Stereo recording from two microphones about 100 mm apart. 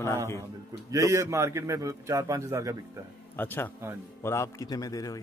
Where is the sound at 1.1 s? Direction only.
30° right (ahead or behind).